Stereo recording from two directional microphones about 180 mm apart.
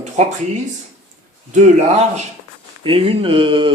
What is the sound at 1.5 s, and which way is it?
A man's voice, 40° right (ahead or behind).